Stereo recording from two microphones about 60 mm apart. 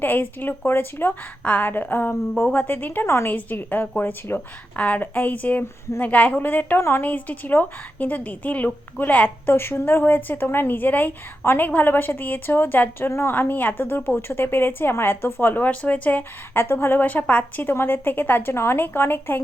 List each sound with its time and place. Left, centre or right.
0.0 s a woman's voice: left
2.3 s a woman's voice: left
4.8 s a woman's voice: left
6.7 s speech: left
7.0 s a woman's voice: left
9.6 s speech: left
10.0 s a woman's voice: left
13.1 s speech: left
13.3 s a woman's voice: left
16.6 s a woman's voice: left
17.1 s a woman's voice: left
17.6 s a woman's voice: left